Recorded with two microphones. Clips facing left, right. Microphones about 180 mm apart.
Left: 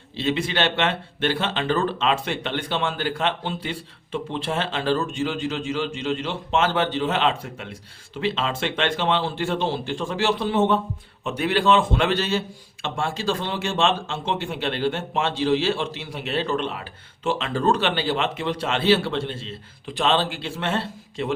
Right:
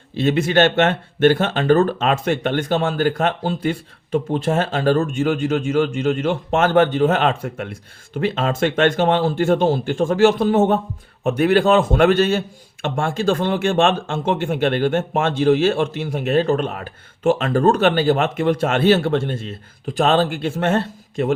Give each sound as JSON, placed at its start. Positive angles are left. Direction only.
{"t": 0.2, "sound": "speech", "side_deg": -50}